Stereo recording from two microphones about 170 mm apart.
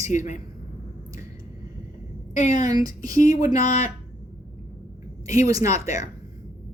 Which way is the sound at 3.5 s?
45° left (ahead or behind).